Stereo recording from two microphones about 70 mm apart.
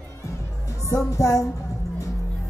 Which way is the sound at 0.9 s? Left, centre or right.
Left.